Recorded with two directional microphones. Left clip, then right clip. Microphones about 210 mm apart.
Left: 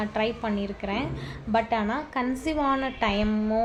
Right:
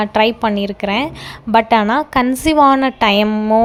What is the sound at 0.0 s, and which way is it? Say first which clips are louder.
A woman's voice: right 13 dB; 50° right (ahead or behind).